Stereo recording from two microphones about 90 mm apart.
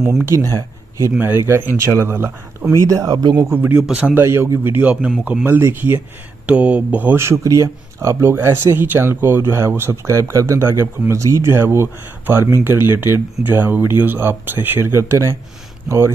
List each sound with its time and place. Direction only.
0.2 s speech: 30° right (ahead or behind)
1.1 s speech: 25° right (ahead or behind)
2.9 s speech: 40° right (ahead or behind)
3.5 s speech: 20° right (ahead or behind)
6.4 s speech: 15° right (ahead or behind)
7.2 s speech: 35° right (ahead or behind)